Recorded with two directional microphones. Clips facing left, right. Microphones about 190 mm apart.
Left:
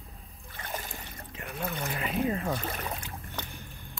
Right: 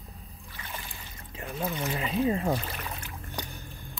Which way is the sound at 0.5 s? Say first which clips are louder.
Left 4 dB; 40° left (ahead or behind).